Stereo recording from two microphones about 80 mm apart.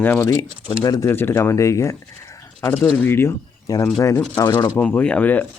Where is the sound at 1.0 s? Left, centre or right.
Left.